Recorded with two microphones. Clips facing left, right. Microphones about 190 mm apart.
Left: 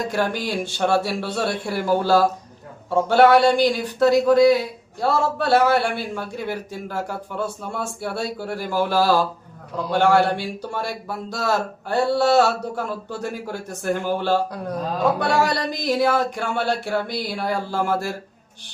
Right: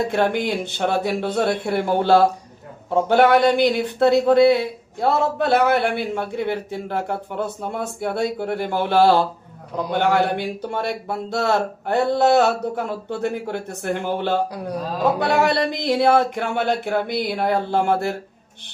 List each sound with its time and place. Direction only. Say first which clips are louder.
0.0 s speech: right 4 dB; 20° right (ahead or behind)